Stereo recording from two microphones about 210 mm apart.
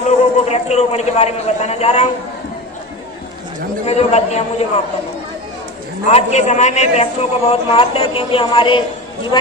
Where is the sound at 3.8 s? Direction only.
30° left (ahead or behind).